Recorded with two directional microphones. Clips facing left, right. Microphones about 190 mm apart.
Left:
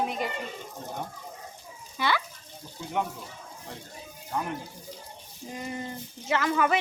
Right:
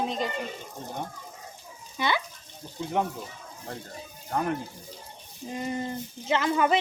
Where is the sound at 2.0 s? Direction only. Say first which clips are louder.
Even; 20° right (ahead or behind).